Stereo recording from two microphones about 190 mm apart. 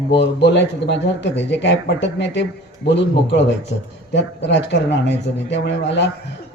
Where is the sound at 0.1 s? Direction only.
65° left (ahead or behind).